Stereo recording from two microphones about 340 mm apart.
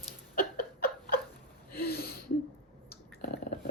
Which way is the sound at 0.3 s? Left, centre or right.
Left.